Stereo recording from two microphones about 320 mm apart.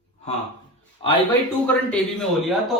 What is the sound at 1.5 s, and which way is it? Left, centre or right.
Speech, centre.